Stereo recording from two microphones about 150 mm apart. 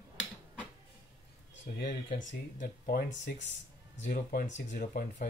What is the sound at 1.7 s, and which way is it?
Speech, 65° left (ahead or behind).